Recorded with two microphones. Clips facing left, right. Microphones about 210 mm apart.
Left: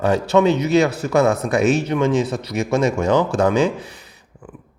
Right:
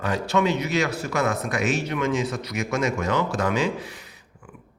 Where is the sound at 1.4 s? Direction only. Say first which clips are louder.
Left 8 dB; 35° left (ahead or behind).